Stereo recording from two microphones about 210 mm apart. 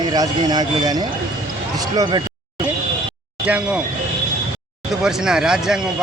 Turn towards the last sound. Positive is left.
turn(degrees=-5)  # may be behind; listen again after turning